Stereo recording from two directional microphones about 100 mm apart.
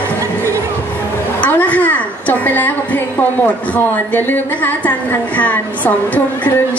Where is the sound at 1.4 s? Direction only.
15° left (ahead or behind).